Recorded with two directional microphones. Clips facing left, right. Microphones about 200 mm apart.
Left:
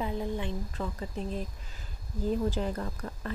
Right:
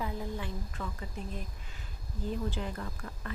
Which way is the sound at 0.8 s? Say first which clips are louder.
Left 6 dB; 30° left (ahead or behind).